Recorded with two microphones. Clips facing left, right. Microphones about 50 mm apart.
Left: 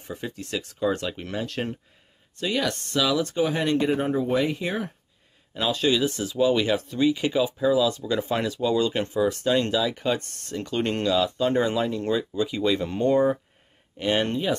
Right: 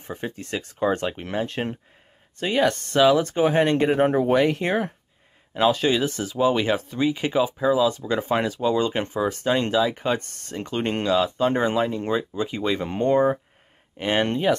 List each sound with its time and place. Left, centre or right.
0.0 s speech: right
4.0 s speech: right
5.6 s speech: right